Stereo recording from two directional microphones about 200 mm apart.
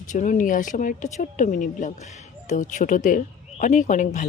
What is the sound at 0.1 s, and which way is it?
Speech, 40° left (ahead or behind).